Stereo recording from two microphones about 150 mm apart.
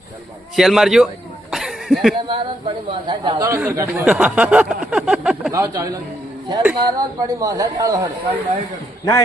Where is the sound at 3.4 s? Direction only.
15° right (ahead or behind).